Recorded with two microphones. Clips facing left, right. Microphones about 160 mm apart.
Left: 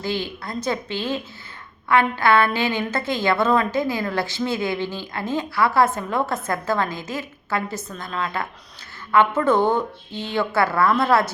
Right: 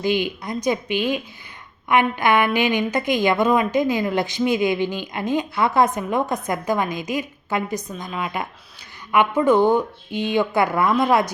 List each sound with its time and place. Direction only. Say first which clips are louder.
0.0 s a woman's voice: right 5 dB; 15° right (ahead or behind)